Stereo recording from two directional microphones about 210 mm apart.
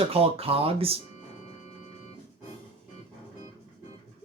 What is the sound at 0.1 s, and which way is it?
Speech, 30° right (ahead or behind).